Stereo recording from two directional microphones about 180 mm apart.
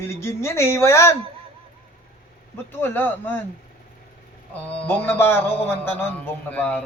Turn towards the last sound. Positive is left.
turn(degrees=10)  # may be behind; listen again after turning